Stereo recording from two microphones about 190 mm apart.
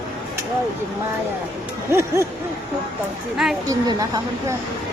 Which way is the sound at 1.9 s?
15° right (ahead or behind).